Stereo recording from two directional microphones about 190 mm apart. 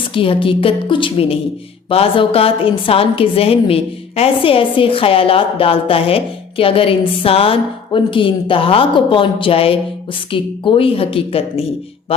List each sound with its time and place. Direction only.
0.1 s a woman's voice: 30° left (ahead or behind)